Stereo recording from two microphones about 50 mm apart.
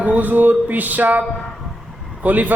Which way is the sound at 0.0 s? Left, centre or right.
Right.